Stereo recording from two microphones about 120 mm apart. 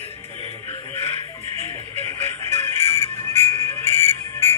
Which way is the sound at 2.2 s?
20° left (ahead or behind).